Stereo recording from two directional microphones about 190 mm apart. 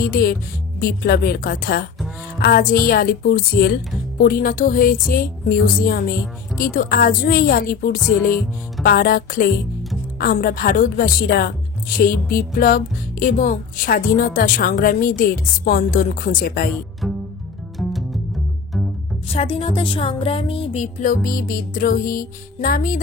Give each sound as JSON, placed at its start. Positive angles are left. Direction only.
{"t": 0.1, "sound": "music", "side_deg": 50}
{"t": 2.9, "sound": "music", "side_deg": 50}
{"t": 17.0, "sound": "music", "side_deg": 0}
{"t": 19.2, "sound": "speech", "side_deg": 30}
{"t": 21.0, "sound": "music", "side_deg": 45}